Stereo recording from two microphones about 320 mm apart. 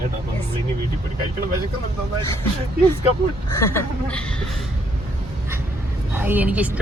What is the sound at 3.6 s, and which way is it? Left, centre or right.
Speech, centre.